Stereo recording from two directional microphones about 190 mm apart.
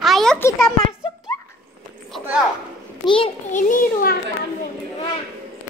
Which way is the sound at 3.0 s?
25° left (ahead or behind).